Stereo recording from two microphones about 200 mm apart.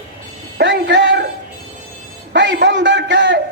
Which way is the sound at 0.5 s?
60° right (ahead or behind).